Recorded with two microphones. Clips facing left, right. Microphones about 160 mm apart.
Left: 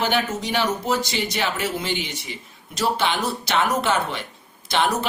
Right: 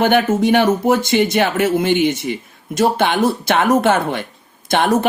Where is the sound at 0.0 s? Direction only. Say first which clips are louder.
Right 9 dB; 55° right (ahead or behind).